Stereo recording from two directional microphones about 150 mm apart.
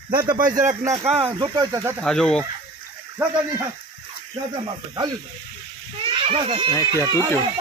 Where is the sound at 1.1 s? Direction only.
35° right (ahead or behind).